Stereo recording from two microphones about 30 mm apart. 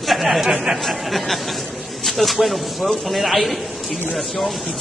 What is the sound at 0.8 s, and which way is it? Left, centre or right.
Speech, centre.